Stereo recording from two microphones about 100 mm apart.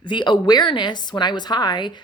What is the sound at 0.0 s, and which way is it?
A woman's voice, 50° left (ahead or behind).